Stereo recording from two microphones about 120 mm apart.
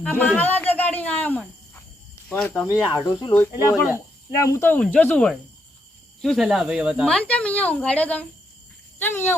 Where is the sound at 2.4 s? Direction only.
20° left (ahead or behind).